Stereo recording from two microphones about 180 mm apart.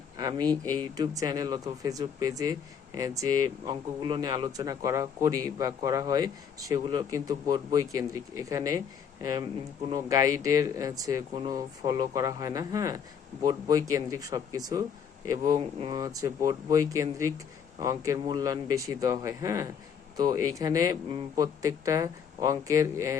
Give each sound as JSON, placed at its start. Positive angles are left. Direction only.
{"t": 0.2, "sound": "speech", "side_deg": -20}
{"t": 9.9, "sound": "speech", "side_deg": -20}